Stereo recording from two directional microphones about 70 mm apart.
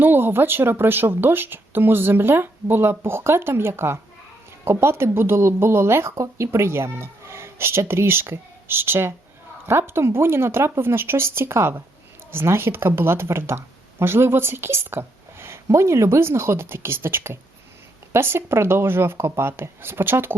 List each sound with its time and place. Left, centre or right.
0.0 s speech: right